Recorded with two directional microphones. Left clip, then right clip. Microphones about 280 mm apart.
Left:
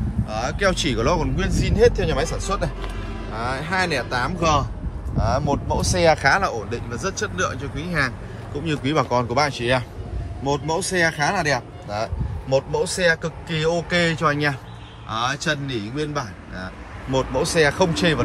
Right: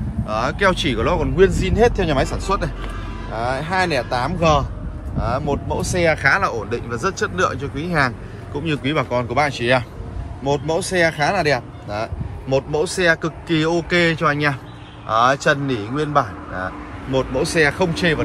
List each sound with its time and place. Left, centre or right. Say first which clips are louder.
0.3 s speech: right 4 dB; centre
5.8 s speech: right 1 dB; left
6.0 s speech: right 1 dB; centre
17.1 s speech: right 1 dB; centre